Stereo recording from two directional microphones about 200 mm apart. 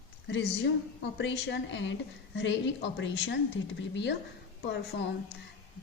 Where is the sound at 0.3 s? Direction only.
65° left (ahead or behind).